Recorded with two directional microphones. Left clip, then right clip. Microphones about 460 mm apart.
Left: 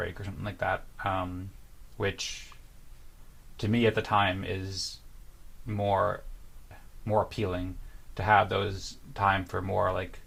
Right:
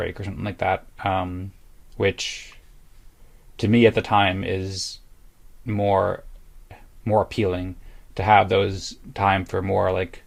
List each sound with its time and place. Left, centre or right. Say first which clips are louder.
0.0 s speech: right 7 dB; right
3.6 s speech: right 9 dB; right
7.0 s speech: right 8 dB; right